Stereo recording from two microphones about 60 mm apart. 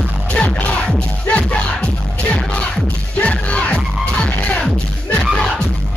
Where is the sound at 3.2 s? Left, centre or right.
Left.